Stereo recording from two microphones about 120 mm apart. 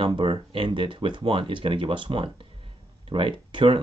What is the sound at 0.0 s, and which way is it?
Speech, 50° right (ahead or behind).